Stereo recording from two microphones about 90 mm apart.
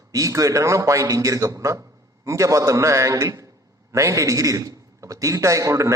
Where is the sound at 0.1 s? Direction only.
40° right (ahead or behind).